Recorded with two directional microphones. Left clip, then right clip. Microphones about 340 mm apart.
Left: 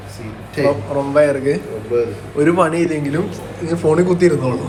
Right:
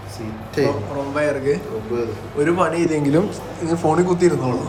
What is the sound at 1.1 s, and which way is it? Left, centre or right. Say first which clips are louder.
Speech: left 6 dB; centre.